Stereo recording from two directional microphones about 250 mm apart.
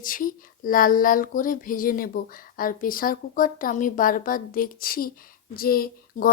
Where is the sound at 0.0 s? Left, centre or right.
Left.